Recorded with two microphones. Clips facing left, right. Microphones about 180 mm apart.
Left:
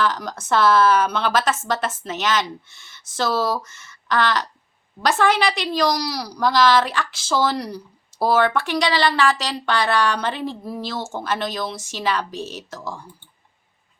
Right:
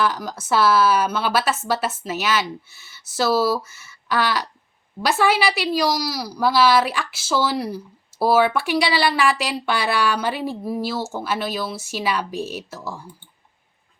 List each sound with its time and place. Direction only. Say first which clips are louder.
0.0 s speech: even; 10° right (ahead or behind)